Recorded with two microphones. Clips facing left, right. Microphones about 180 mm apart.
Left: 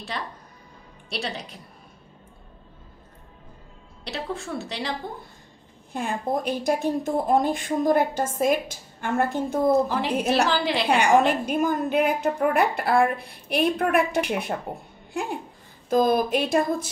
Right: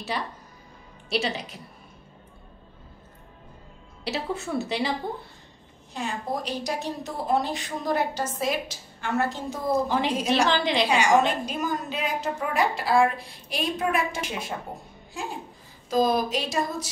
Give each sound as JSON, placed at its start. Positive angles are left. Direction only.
{"t": 1.1, "sound": "a woman's voice", "side_deg": 0}
{"t": 4.0, "sound": "a woman's voice", "side_deg": -5}
{"t": 5.9, "sound": "speech", "side_deg": 55}
{"t": 9.7, "sound": "a woman's voice", "side_deg": 0}
{"t": 10.9, "sound": "a woman's voice", "side_deg": 55}